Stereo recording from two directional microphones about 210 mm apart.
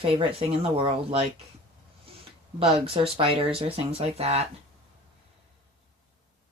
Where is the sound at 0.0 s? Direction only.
25° right (ahead or behind).